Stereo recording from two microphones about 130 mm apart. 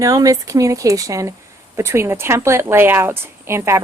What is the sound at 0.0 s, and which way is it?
A woman's voice, 25° right (ahead or behind).